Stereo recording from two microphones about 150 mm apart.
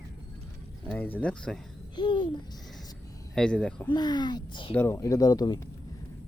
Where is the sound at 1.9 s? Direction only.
30° left (ahead or behind).